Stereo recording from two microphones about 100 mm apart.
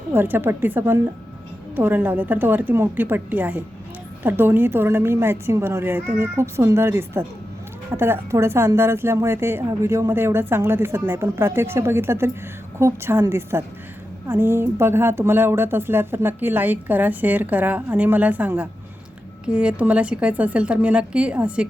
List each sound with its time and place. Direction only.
0.1 s a woman's voice: 20° right (ahead or behind)